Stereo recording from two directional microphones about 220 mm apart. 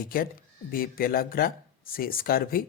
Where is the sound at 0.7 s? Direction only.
40° left (ahead or behind).